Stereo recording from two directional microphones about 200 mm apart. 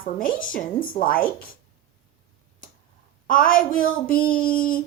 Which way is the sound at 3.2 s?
45° left (ahead or behind).